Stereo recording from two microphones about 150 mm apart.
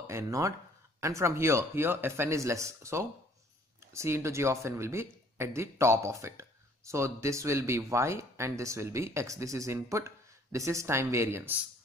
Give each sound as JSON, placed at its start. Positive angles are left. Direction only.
{"t": 0.0, "sound": "speech", "side_deg": -20}